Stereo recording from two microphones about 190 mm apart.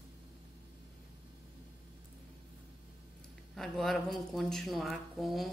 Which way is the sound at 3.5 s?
Centre (ahead or behind).